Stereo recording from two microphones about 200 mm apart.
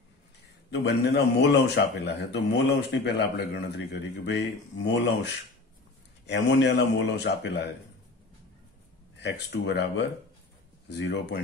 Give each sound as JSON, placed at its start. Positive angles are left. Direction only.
{"t": 0.7, "sound": "a man's voice", "side_deg": 60}
{"t": 6.2, "sound": "a man's voice", "side_deg": 60}
{"t": 9.2, "sound": "a man's voice", "side_deg": 60}